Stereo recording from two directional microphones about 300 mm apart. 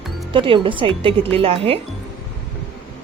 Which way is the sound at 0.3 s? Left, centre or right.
Centre.